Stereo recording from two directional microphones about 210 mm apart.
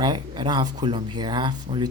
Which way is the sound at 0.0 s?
20° right (ahead or behind).